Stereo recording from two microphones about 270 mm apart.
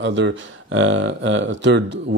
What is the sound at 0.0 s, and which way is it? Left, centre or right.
Speech, right.